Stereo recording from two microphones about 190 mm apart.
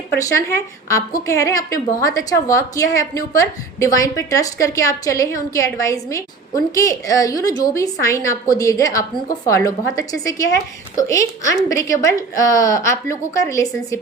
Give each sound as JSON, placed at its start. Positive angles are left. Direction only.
{"t": 0.2, "sound": "a woman's voice", "side_deg": 15}